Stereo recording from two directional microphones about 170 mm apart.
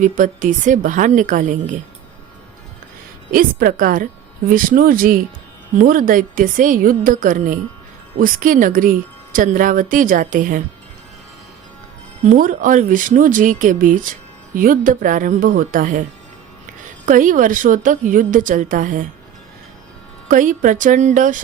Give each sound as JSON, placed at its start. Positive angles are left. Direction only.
{"t": 0.0, "sound": "a woman's voice", "side_deg": -50}
{"t": 3.3, "sound": "a woman's voice", "side_deg": -55}
{"t": 12.2, "sound": "a woman's voice", "side_deg": -50}
{"t": 17.1, "sound": "a woman's voice", "side_deg": -50}
{"t": 20.2, "sound": "a woman's voice", "side_deg": -50}